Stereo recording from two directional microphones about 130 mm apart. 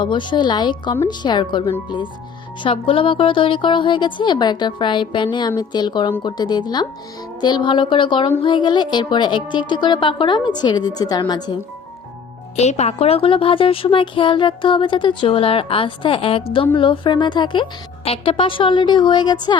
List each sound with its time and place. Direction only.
0.0 s a woman's voice: 35° left (ahead or behind)
12.5 s a woman's voice: 60° left (ahead or behind); by 19.5 s 35° left (ahead or behind)